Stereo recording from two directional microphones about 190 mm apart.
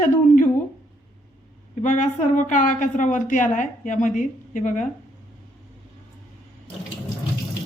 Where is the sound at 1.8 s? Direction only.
40° left (ahead or behind).